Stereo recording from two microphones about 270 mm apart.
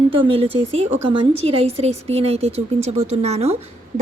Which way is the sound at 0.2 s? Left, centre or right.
Right.